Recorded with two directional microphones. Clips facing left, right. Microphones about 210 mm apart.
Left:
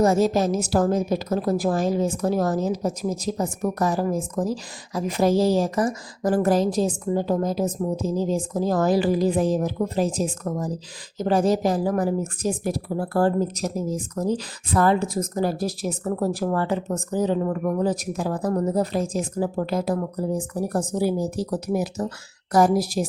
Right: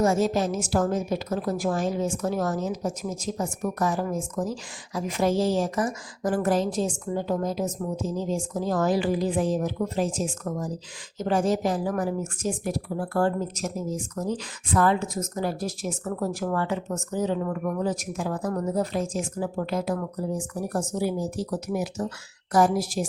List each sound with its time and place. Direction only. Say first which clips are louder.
0.0 s speech: left 3 dB; 40° left (ahead or behind)